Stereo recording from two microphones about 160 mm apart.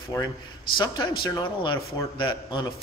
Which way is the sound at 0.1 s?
20° left (ahead or behind).